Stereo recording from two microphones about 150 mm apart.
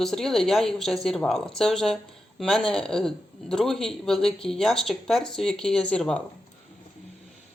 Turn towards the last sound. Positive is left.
turn(degrees=5)  # may be behind; listen again after turning